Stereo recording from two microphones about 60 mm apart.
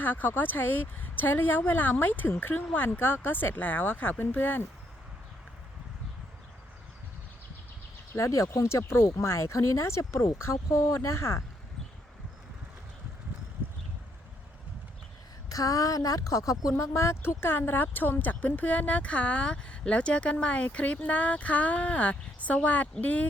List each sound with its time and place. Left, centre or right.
0.0 s speech: left
8.1 s speech: left
15.4 s speech: left